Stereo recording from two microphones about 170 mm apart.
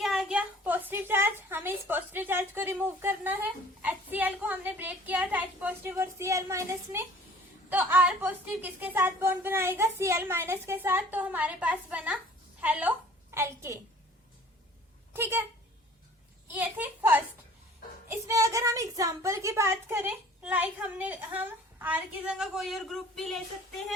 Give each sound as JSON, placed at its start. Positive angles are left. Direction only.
{"t": 0.0, "sound": "a woman's voice", "side_deg": 0}
{"t": 15.1, "sound": "speech", "side_deg": -15}
{"t": 16.5, "sound": "a child's voice", "side_deg": -10}